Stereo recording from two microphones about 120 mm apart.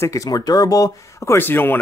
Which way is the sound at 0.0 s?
25° left (ahead or behind).